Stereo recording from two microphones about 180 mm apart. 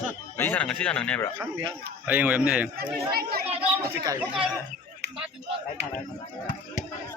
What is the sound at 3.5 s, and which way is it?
Speech, 20° right (ahead or behind).